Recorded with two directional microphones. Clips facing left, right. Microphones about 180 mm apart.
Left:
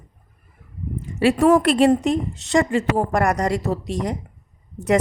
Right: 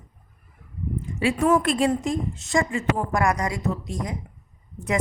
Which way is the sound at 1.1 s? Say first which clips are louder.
Left 5 dB; 70° left (ahead or behind).